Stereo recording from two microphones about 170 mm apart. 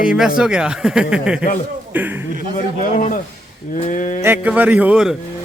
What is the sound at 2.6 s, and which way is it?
Speech, 50° left (ahead or behind).